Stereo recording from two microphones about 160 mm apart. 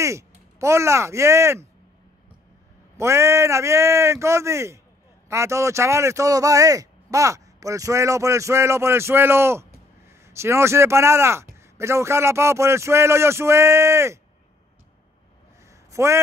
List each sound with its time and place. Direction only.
0.0 s speech: 20° right (ahead or behind)
3.0 s speech: 15° right (ahead or behind)
15.9 s speech: 20° right (ahead or behind)